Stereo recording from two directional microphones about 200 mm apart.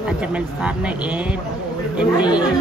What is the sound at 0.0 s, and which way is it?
A woman's voice, 5° right (ahead or behind).